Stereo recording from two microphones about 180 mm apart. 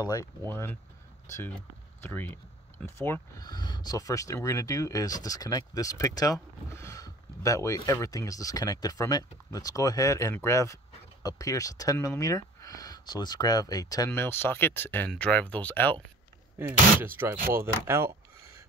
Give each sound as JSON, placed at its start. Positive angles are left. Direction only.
{"t": 0.0, "sound": "speech", "side_deg": 20}
{"t": 16.5, "sound": "speech", "side_deg": -10}
{"t": 17.8, "sound": "a sound", "side_deg": -15}